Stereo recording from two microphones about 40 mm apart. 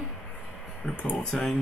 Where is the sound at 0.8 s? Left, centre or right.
Left.